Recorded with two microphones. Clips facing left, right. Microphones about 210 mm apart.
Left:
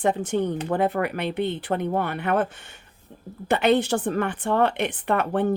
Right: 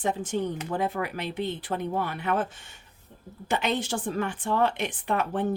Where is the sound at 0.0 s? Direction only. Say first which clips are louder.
Left 5 dB; 60° left (ahead or behind).